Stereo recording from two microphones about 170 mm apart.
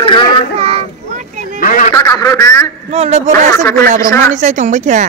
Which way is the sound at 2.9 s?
40° right (ahead or behind).